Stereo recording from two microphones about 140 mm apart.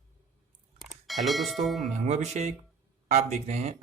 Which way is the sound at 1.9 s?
55° right (ahead or behind).